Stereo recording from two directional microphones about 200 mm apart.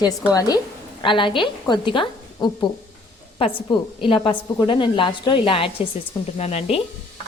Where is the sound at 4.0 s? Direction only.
25° left (ahead or behind).